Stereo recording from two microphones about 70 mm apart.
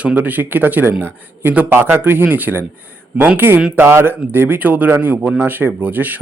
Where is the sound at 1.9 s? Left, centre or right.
Right.